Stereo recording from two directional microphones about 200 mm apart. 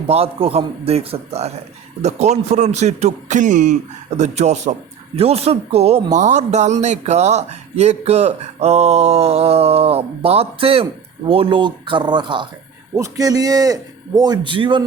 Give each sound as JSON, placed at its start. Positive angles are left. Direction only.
{"t": 0.1, "sound": "speech", "side_deg": -30}